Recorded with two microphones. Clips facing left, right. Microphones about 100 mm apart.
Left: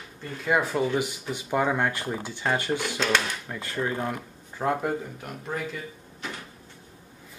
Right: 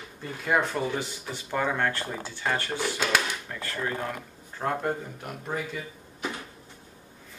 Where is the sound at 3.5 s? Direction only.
15° left (ahead or behind).